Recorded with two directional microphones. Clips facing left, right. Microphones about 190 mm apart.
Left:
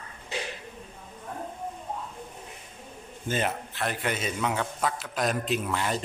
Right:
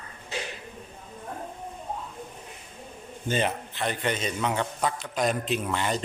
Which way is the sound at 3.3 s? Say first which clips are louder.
Right 2 dB; 5° left (ahead or behind).